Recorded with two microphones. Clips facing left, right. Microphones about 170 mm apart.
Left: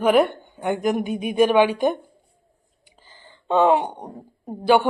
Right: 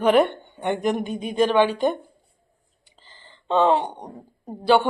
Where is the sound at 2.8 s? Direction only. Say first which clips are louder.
Left 2 dB; 10° left (ahead or behind).